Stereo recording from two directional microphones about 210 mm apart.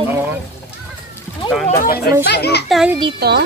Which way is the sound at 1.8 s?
45° left (ahead or behind).